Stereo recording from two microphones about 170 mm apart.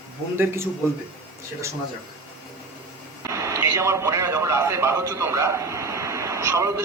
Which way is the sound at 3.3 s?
15° right (ahead or behind).